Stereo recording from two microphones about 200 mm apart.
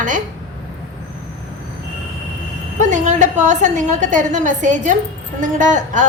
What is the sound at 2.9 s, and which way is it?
A woman's voice, 40° right (ahead or behind).